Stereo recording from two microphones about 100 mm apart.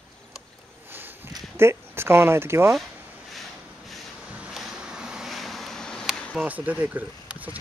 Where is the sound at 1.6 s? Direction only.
25° right (ahead or behind).